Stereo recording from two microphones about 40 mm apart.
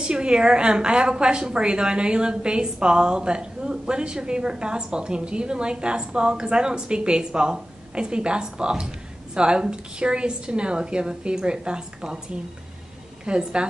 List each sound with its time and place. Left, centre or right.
0.0 s a woman's voice: right
13.2 s a woman's voice: right